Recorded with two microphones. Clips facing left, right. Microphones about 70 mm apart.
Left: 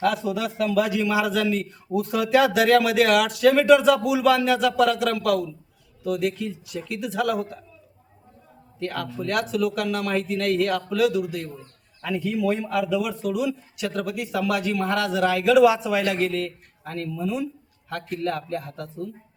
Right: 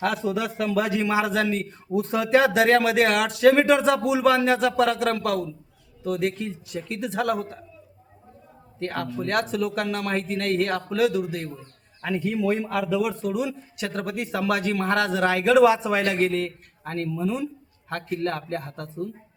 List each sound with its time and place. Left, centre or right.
0.0 s a man's voice: right
8.8 s a man's voice: right